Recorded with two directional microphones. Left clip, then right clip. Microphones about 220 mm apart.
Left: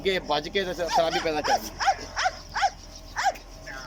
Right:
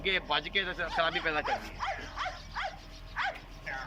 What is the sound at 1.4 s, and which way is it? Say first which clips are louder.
Dog: left 10 dB; 45° left (ahead or behind).